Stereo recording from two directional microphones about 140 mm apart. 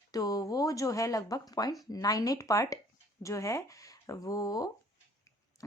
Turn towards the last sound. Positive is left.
turn(degrees=25)  # may be behind; listen again after turning